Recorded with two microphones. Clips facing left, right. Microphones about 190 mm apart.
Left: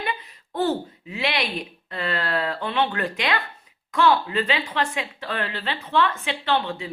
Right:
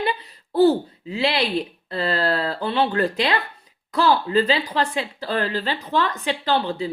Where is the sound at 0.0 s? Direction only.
35° right (ahead or behind).